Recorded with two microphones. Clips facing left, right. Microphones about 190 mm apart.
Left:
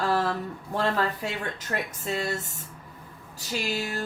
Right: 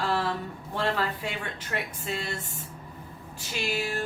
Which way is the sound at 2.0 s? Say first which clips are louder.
Left 4 dB; 40° left (ahead or behind).